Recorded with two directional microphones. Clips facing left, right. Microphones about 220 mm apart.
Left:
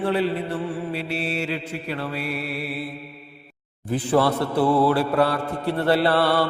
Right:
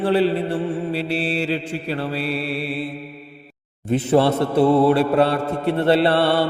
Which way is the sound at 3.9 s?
25° right (ahead or behind).